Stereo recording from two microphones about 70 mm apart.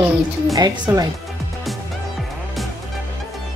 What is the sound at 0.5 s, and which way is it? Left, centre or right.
Speech, right.